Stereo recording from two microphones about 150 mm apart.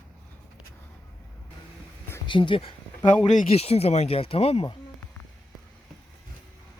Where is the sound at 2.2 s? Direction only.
35° left (ahead or behind).